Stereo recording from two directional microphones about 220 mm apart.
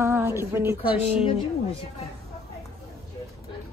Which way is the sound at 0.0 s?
10° right (ahead or behind).